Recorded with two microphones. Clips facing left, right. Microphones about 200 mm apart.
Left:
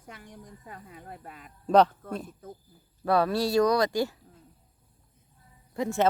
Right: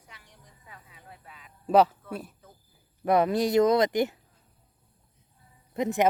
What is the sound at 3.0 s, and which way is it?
Speech, 20° right (ahead or behind).